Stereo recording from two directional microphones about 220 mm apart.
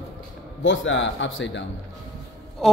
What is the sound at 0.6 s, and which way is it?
A man's voice, 60° left (ahead or behind).